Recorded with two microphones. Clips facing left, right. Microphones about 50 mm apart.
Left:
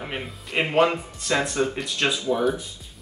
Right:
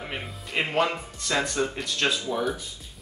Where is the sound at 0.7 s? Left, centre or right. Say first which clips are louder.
Left 7 dB; left.